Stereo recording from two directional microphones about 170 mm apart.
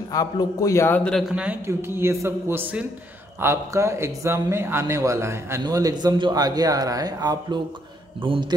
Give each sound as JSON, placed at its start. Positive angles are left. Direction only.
{"t": 0.1, "sound": "a man's voice", "side_deg": 20}
{"t": 1.3, "sound": "a man's voice", "side_deg": -10}